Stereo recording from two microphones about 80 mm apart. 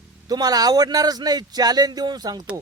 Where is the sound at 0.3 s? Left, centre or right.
Right.